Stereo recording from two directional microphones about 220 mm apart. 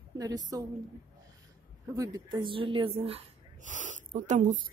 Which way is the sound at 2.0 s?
15° right (ahead or behind).